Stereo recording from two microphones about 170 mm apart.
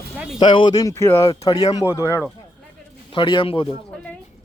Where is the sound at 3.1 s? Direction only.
30° left (ahead or behind).